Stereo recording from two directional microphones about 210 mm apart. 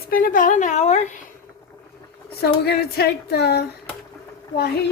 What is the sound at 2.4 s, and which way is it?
Speech, 50° left (ahead or behind).